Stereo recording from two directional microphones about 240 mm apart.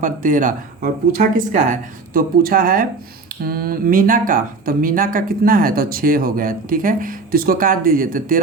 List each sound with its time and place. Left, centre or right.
0.0 s speech: right